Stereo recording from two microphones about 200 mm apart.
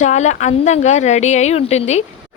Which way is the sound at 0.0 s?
35° left (ahead or behind).